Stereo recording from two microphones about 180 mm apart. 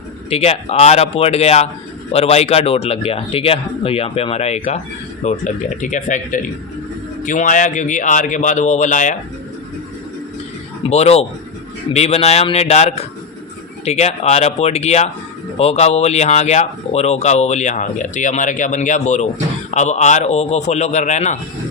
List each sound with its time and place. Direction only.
0.3 s speech: 35° left (ahead or behind)
10.8 s speech: 35° left (ahead or behind)